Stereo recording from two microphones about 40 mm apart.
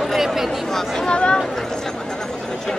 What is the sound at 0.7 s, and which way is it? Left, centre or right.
Speech, centre.